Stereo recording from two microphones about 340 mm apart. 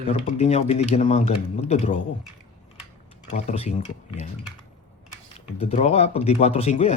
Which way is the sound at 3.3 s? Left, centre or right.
Centre.